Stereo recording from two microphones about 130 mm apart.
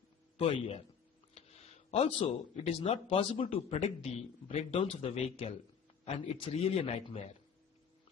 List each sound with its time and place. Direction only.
0.3 s speech: 45° left (ahead or behind)
1.9 s speech: 50° left (ahead or behind)